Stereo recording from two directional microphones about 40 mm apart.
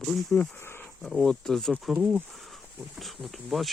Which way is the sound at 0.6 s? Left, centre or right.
Left.